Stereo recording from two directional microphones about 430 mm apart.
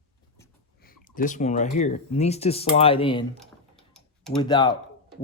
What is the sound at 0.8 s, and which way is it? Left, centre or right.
Speech, centre.